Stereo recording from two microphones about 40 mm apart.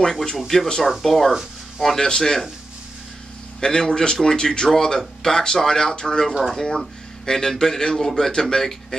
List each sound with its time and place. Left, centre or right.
0.0 s speech: centre
3.6 s speech: centre